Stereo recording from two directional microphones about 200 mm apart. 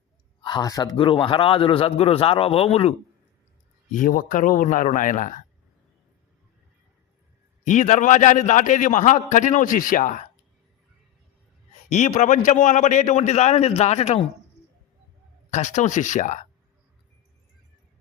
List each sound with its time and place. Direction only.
0.4 s a man's voice: 20° left (ahead or behind)
3.9 s a man's voice: 40° left (ahead or behind)
7.6 s a man's voice: 35° left (ahead or behind)
11.9 s a man's voice: 35° left (ahead or behind)
15.4 s a man's voice: 35° left (ahead or behind)